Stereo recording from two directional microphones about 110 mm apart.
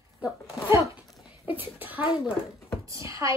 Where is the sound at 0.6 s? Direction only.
25° right (ahead or behind).